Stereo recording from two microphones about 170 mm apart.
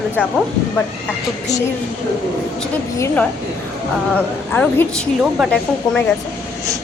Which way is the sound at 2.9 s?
15° left (ahead or behind).